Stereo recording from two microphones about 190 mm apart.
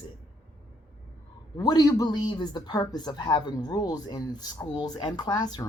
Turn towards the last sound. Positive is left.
turn(degrees=25)  # may be behind; listen again after turning